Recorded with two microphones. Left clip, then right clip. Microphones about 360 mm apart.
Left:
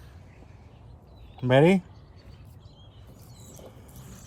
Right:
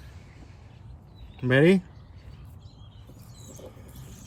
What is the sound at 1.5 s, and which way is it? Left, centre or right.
Speech, centre.